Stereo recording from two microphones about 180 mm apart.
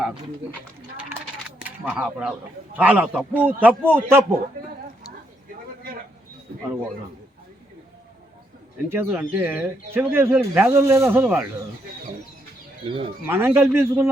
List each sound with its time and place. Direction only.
1.5 s speech: 10° right (ahead or behind)
8.9 s speech: 10° right (ahead or behind)
12.8 s speech: 30° right (ahead or behind)
13.2 s speech: 10° right (ahead or behind)